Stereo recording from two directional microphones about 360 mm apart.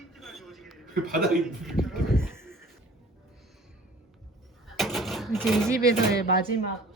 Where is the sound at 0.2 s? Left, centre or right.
Centre.